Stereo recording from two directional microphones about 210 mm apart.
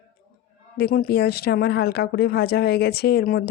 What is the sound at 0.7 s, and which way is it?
Speech, 45° left (ahead or behind).